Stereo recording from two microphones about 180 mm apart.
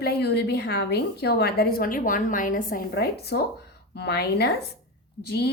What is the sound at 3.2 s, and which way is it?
A woman's voice, 65° left (ahead or behind).